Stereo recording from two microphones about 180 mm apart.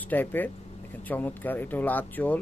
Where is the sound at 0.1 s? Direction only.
10° left (ahead or behind).